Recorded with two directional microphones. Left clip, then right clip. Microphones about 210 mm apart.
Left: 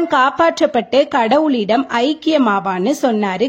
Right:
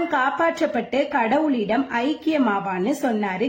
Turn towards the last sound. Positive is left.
turn(degrees=45)  # may be behind; listen again after turning